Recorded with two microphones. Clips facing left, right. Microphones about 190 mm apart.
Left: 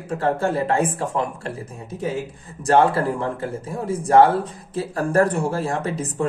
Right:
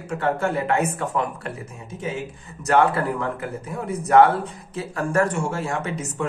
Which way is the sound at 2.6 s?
30° left (ahead or behind).